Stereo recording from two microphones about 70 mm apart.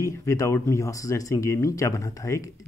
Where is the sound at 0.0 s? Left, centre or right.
Left.